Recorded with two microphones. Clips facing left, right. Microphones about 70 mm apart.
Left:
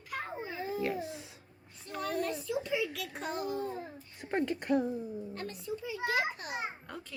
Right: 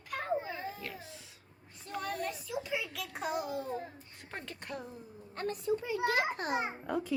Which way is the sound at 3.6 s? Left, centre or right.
Centre.